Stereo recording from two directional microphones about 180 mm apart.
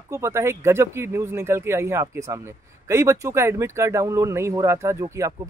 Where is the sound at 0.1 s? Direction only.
15° right (ahead or behind).